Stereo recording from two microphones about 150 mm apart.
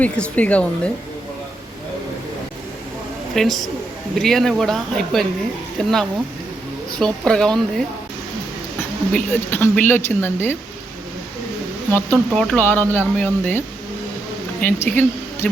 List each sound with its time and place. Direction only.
0.0 s speech: 10° left (ahead or behind)
3.3 s speech: centre (ahead or behind)
7.0 s speech: 5° left (ahead or behind)
9.1 s speech: 10° left (ahead or behind)
11.9 s speech: 10° left (ahead or behind)